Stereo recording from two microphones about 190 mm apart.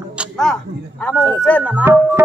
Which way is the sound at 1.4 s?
5° left (ahead or behind).